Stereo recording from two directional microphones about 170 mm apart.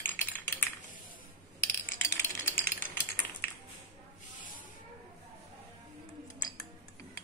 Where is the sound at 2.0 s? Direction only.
15° left (ahead or behind).